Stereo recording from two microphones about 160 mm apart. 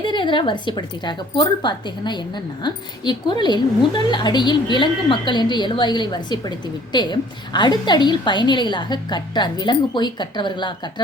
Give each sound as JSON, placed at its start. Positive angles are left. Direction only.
{"t": 0.0, "sound": "a woman's voice", "side_deg": 30}